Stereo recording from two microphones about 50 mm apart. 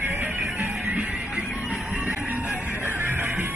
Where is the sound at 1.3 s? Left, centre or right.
Right.